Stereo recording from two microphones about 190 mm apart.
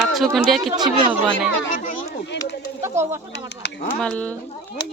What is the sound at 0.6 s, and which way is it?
Speech, 25° right (ahead or behind).